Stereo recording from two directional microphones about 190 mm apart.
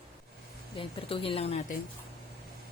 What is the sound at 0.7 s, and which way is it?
Speech, 25° left (ahead or behind).